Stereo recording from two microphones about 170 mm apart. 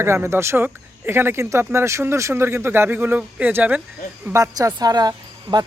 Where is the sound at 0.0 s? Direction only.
15° right (ahead or behind).